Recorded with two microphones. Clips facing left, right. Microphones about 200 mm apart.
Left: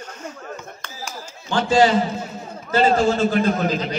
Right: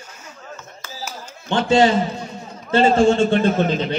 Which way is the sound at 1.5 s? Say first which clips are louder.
Right 1 dB; 25° right (ahead or behind).